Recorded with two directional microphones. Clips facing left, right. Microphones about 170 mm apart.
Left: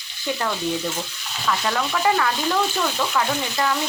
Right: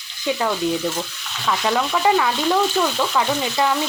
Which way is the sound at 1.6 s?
15° right (ahead or behind).